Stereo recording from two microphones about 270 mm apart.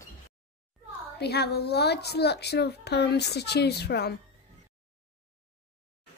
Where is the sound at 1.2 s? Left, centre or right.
Left.